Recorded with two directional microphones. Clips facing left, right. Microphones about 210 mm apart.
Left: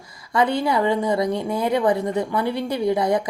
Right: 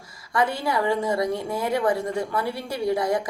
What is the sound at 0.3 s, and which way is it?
A woman's voice, 20° left (ahead or behind).